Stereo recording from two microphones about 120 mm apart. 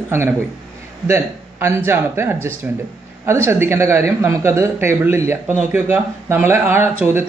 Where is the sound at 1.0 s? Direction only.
20° right (ahead or behind).